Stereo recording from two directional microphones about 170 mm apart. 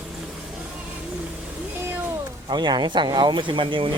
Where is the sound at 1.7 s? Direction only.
15° right (ahead or behind).